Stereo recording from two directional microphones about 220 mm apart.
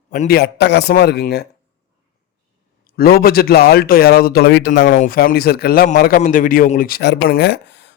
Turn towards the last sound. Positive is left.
turn(degrees=50)  # may be behind; listen again after turning